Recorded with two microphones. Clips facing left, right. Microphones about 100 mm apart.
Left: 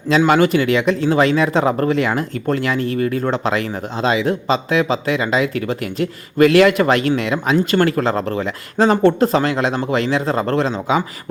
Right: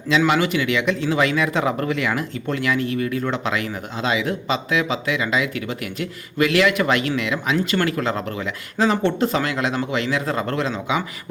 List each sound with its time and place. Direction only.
0.3 s speech: 40° left (ahead or behind)